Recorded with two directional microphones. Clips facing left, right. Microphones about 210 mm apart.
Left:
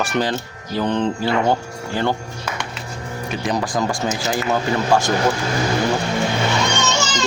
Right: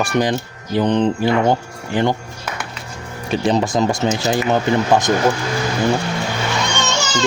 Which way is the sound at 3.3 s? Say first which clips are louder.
Right 6 dB; 25° right (ahead or behind).